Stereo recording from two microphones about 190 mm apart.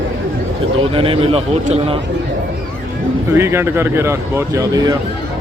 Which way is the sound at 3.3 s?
15° right (ahead or behind).